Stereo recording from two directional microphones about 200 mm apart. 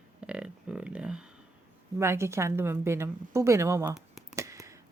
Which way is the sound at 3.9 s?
Centre (ahead or behind).